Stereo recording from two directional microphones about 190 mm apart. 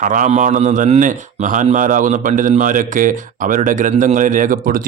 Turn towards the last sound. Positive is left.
turn(degrees=-45)  # may be behind; listen again after turning